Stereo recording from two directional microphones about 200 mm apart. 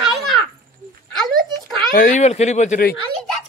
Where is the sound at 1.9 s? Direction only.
40° left (ahead or behind).